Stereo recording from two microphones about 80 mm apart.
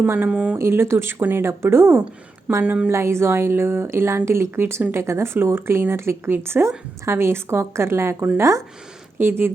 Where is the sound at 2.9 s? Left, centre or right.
Right.